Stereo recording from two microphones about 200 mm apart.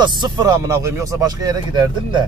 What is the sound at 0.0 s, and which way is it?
Speech, 20° right (ahead or behind).